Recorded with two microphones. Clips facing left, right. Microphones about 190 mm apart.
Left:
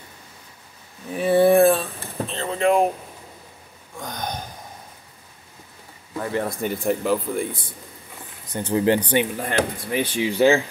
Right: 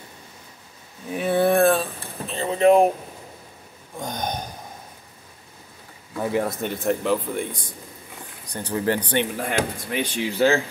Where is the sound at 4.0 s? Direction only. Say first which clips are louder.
Right 2 dB; 20° right (ahead or behind).